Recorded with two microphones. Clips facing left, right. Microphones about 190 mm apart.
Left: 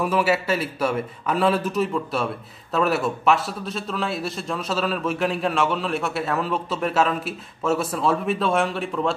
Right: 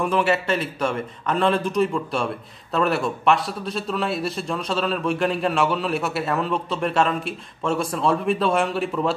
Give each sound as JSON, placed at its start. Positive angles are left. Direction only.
{"t": 0.0, "sound": "a man's voice", "side_deg": 5}